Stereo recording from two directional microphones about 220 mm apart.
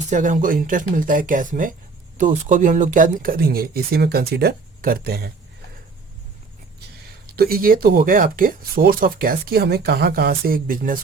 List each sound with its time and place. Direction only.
0.1 s speech: 35° right (ahead or behind)
7.3 s speech: 45° right (ahead or behind)